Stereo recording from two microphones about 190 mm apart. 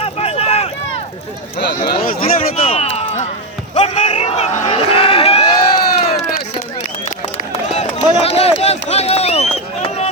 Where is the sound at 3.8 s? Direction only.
35° left (ahead or behind).